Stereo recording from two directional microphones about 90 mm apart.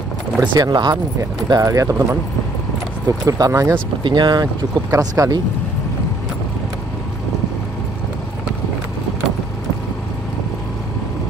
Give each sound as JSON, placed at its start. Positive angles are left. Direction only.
{"t": 0.4, "sound": "speech", "side_deg": -55}
{"t": 1.5, "sound": "speech", "side_deg": -40}
{"t": 3.3, "sound": "speech", "side_deg": -40}
{"t": 4.0, "sound": "speech", "side_deg": -60}
{"t": 4.9, "sound": "speech", "side_deg": -40}